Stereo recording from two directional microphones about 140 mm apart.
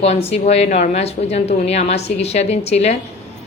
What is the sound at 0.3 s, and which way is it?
A woman's voice, 50° left (ahead or behind).